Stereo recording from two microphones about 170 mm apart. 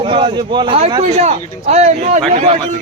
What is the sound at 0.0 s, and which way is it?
A man's voice, 30° right (ahead or behind).